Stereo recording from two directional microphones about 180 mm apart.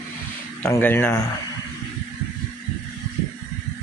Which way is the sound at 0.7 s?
10° left (ahead or behind).